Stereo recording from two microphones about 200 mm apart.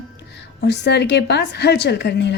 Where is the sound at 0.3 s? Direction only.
60° left (ahead or behind).